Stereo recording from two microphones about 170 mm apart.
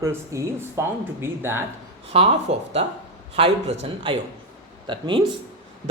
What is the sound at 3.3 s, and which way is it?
Speech, 35° right (ahead or behind).